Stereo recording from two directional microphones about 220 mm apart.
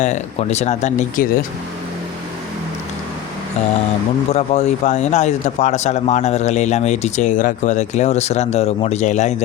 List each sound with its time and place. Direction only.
0.0 s speech: 30° left (ahead or behind)
4.3 s speech: 30° left (ahead or behind)